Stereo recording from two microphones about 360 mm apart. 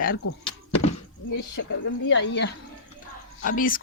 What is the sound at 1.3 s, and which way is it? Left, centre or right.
Speech, left.